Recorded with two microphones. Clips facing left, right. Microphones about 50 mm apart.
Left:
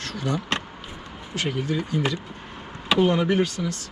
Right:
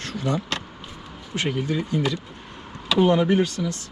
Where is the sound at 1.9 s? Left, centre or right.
Left.